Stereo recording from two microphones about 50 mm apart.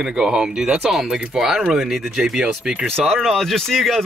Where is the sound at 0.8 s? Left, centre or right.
Centre.